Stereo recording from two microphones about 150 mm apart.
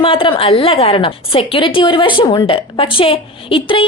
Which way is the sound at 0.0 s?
35° left (ahead or behind).